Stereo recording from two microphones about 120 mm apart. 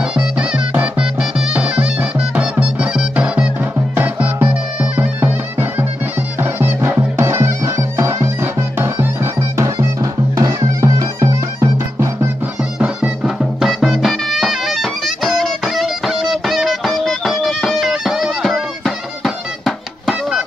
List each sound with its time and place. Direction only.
0.1 s music: 5° right (ahead or behind); by 12.3 s 25° right (ahead or behind)
12.7 s music: 10° right (ahead or behind)